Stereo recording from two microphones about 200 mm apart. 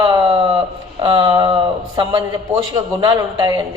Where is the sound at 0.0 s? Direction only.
20° right (ahead or behind).